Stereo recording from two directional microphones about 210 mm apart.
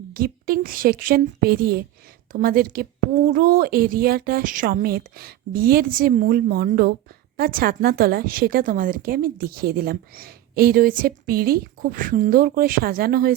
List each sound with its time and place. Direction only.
0.1 s a woman's voice: 45° right (ahead or behind)